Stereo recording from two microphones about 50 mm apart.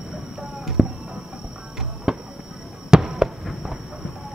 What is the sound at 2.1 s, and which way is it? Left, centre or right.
Basketball bounce, centre.